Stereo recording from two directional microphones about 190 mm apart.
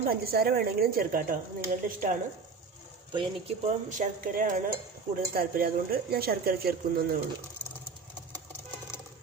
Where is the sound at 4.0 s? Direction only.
45° right (ahead or behind).